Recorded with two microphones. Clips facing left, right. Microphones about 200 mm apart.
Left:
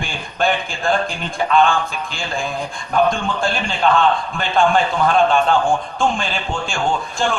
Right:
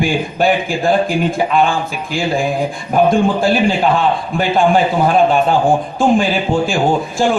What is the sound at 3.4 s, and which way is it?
A man's voice, 10° right (ahead or behind).